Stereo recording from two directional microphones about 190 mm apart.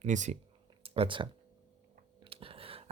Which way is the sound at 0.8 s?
30° right (ahead or behind).